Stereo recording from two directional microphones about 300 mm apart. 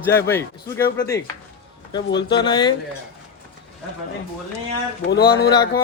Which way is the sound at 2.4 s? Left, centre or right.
Centre.